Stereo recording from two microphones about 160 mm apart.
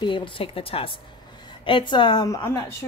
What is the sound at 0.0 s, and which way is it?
A woman's voice, 30° left (ahead or behind).